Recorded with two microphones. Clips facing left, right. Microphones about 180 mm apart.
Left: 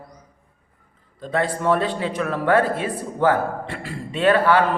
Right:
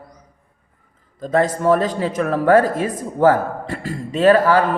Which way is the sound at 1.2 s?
40° right (ahead or behind).